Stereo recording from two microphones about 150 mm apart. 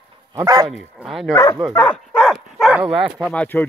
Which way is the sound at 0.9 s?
Centre (ahead or behind).